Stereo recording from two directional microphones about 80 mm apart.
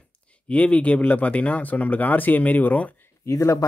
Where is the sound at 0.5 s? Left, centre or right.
Centre.